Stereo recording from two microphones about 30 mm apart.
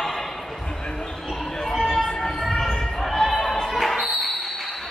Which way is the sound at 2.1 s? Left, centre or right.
Left.